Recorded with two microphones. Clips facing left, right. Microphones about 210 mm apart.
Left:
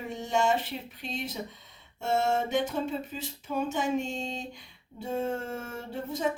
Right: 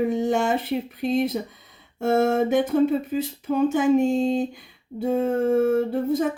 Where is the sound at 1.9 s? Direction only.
55° right (ahead or behind).